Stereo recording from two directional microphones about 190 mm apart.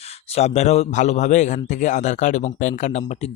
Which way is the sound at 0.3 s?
35° left (ahead or behind).